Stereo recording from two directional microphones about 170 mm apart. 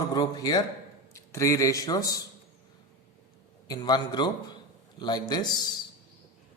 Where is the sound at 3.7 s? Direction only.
25° left (ahead or behind).